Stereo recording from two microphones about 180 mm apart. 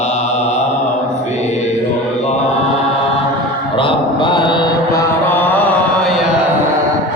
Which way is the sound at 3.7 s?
25° left (ahead or behind).